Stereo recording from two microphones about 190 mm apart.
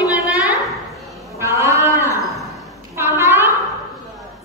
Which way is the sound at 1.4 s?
15° right (ahead or behind).